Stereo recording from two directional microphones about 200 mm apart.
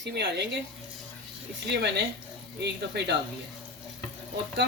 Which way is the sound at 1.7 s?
60° right (ahead or behind).